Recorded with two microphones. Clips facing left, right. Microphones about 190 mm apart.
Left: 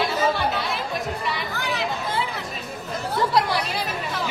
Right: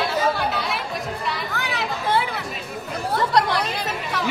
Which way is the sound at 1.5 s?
65° right (ahead or behind).